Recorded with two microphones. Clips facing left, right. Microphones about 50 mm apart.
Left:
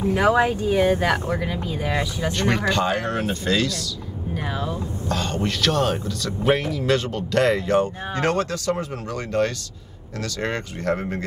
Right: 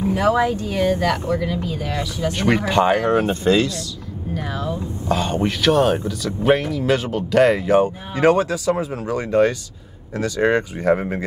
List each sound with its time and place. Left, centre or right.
0.4 s speech: left
2.3 s speech: centre; by 3.7 s right
5.0 s speech: centre